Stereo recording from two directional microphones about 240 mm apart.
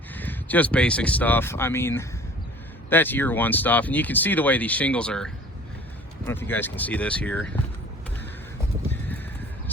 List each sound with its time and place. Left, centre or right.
0.1 s speech: centre